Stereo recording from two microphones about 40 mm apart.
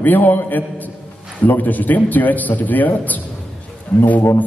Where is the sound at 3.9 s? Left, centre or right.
Left.